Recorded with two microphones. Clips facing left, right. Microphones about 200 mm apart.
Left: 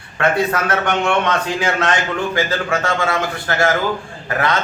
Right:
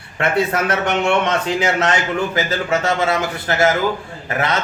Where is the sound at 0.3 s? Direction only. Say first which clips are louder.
Even; 25° right (ahead or behind).